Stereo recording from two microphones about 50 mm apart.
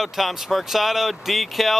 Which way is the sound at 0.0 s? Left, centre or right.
Centre.